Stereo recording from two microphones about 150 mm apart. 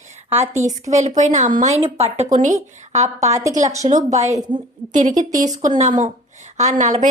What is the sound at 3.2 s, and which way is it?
Speech, 20° right (ahead or behind).